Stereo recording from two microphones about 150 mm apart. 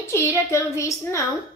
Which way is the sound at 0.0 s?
20° left (ahead or behind).